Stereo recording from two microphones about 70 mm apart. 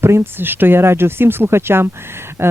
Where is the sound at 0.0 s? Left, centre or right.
Right.